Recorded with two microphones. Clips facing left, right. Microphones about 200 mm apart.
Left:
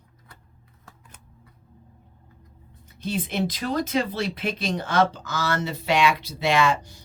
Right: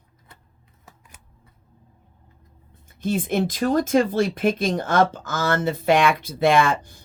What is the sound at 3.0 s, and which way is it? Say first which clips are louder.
Speech: right 4 dB; 50° right (ahead or behind).